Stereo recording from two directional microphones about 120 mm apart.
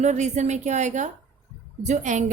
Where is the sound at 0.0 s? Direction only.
75° right (ahead or behind).